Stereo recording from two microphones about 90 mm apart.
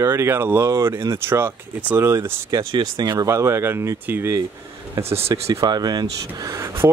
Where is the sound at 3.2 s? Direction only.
35° right (ahead or behind).